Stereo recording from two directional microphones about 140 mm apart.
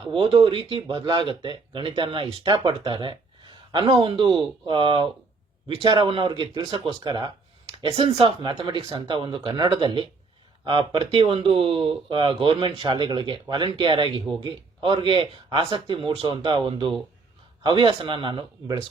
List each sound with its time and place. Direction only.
0.1 s speech: 40° right (ahead or behind)